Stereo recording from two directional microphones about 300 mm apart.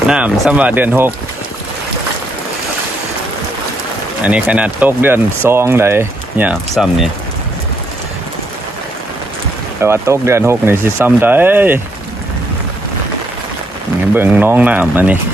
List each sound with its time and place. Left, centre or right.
0.1 s speech: centre
4.2 s speech: centre
9.8 s speech: centre
14.1 s speech: centre